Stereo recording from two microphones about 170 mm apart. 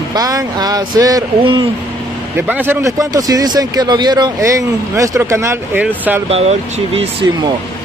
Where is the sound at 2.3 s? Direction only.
10° right (ahead or behind).